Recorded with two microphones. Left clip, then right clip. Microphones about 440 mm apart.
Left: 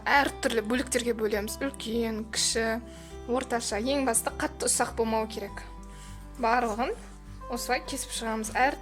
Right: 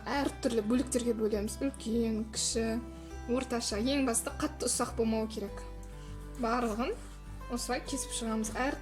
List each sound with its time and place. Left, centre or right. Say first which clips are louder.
0.0 s a woman's voice: left 9 dB; centre